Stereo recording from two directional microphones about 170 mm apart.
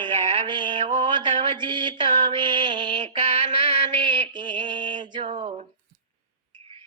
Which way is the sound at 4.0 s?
30° right (ahead or behind).